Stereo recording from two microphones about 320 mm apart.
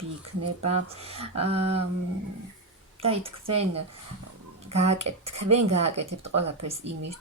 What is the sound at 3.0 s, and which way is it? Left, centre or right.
Speech, centre.